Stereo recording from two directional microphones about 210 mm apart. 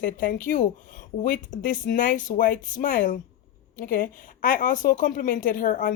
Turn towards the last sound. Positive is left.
turn(degrees=40)  # may be behind; listen again after turning